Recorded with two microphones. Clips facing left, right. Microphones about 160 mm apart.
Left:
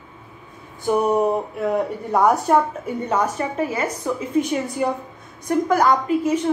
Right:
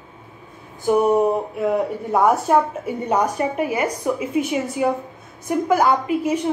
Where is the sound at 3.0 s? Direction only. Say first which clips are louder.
Right 2 dB; 15° right (ahead or behind).